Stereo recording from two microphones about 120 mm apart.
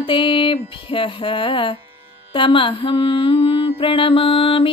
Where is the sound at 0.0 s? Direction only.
45° left (ahead or behind).